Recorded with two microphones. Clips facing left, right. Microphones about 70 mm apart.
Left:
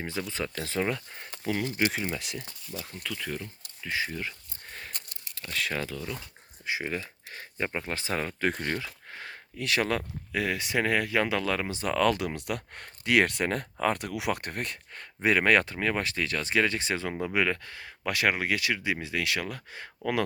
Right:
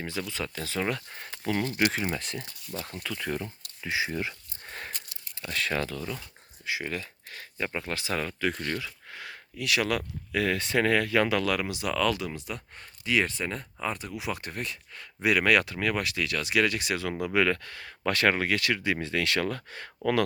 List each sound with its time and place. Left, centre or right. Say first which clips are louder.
0.0 s speech: left 1 dB; centre
2.8 s speech: right 2 dB; centre
6.7 s speech: left 1 dB; left
8.4 s speech: left 1 dB; left
10.3 s speech: right 2 dB; centre
11.7 s speech: left 2 dB; left
12.3 s speech: left 4 dB; left
15.2 s speech: even; left; by 19.9 s centre